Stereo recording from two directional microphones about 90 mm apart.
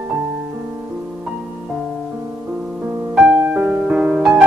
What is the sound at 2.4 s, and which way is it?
Music, 15° right (ahead or behind).